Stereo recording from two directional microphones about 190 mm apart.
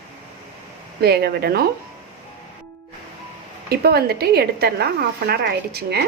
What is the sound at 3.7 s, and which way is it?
A woman's voice, 55° right (ahead or behind).